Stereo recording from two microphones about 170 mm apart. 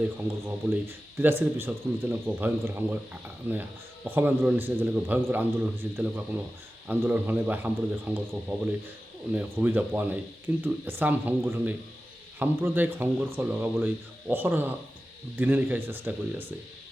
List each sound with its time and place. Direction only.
0.4 s speech: 10° right (ahead or behind)